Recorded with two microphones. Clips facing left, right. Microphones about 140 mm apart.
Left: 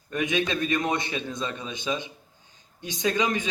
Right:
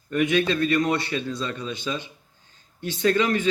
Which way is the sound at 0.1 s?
15° left (ahead or behind).